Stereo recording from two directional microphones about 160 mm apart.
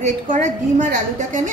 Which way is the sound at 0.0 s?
50° right (ahead or behind).